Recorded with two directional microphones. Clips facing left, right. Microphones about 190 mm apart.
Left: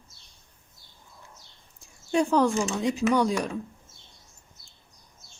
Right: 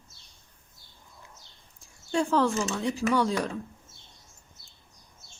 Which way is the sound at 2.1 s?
15° left (ahead or behind).